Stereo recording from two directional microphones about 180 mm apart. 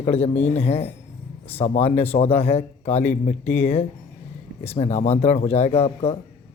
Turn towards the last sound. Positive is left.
turn(degrees=35)  # may be behind; listen again after turning